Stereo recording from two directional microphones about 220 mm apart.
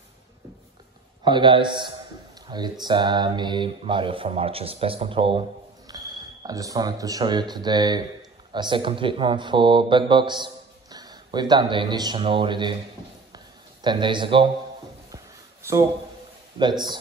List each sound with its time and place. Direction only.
1.2 s speech: 20° right (ahead or behind)
13.8 s speech: 20° right (ahead or behind)